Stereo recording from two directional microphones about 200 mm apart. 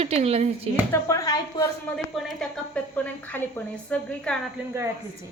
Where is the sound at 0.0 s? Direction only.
30° right (ahead or behind).